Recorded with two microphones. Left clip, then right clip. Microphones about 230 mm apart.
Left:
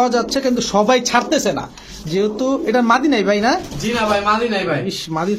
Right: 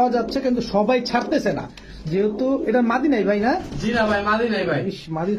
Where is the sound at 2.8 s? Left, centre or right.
Left.